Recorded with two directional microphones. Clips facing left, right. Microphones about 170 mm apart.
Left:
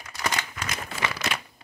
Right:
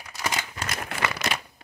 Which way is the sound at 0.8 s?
65° right (ahead or behind).